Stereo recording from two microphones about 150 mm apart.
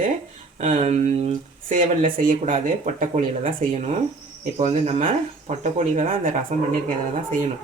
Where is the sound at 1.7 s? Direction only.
65° right (ahead or behind); by 6.1 s 50° right (ahead or behind).